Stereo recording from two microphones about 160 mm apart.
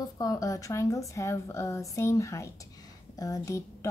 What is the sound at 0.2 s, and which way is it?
Speech, 20° left (ahead or behind).